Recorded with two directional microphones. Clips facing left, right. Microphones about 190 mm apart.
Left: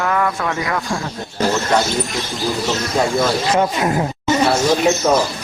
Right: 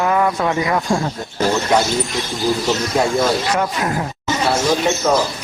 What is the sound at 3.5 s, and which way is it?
Speech, 20° left (ahead or behind).